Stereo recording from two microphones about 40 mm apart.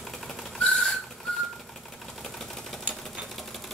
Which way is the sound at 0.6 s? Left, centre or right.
Centre.